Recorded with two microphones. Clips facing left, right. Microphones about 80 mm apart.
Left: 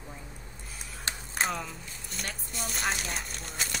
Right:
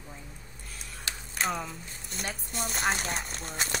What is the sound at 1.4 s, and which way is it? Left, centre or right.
Speech, centre.